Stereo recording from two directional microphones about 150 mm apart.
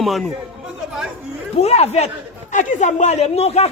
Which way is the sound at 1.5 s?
45° left (ahead or behind).